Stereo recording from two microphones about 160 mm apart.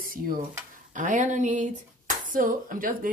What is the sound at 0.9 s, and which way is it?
Speech, 50° right (ahead or behind).